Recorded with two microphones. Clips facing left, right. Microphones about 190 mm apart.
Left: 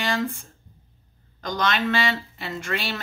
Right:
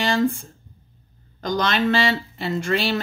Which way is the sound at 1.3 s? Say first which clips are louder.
Right 3 dB; 35° right (ahead or behind).